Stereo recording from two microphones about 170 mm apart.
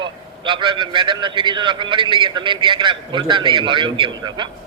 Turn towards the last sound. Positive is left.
turn(degrees=-25)  # may be behind; listen again after turning